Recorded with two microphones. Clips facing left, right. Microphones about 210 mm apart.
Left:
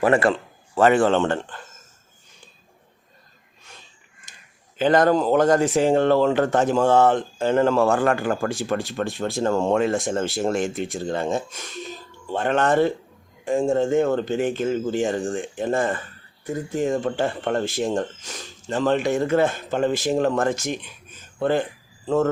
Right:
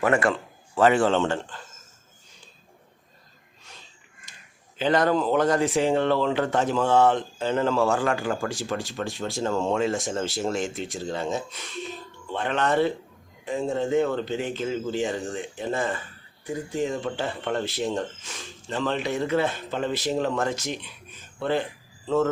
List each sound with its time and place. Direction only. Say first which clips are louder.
0.0 s a man's voice: left 4 dB; 35° left (ahead or behind)
0.8 s speech: left 3 dB; 50° left (ahead or behind)
4.8 s speech: left 4 dB; 50° left (ahead or behind)